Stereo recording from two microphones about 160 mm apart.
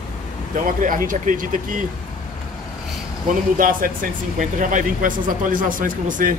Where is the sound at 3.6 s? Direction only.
60° right (ahead or behind).